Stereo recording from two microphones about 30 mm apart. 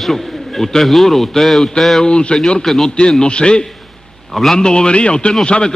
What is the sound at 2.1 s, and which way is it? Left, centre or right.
Speech, left.